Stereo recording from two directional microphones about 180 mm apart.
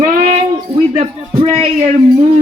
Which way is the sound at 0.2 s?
40° right (ahead or behind).